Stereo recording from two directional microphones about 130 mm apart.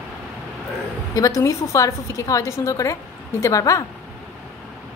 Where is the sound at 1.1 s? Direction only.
25° left (ahead or behind).